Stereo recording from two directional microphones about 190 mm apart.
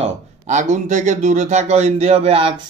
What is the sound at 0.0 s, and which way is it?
A man's voice, 40° right (ahead or behind).